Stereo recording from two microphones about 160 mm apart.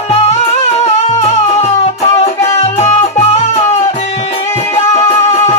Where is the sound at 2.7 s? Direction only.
45° left (ahead or behind).